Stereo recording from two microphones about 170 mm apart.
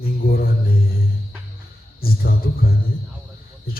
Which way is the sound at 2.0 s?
60° left (ahead or behind).